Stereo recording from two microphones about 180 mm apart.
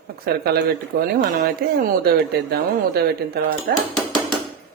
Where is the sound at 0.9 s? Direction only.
55° right (ahead or behind).